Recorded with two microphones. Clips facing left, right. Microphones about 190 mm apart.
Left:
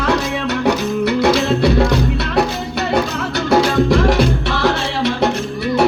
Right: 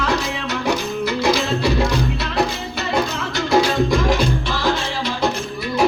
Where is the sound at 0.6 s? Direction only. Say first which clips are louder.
Left 4 dB; 65° left (ahead or behind).